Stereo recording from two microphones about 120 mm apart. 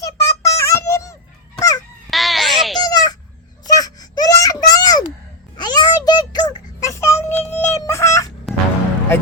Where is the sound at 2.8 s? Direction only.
35° left (ahead or behind).